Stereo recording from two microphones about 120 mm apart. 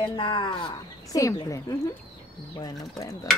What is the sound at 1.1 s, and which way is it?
Speech, 30° left (ahead or behind).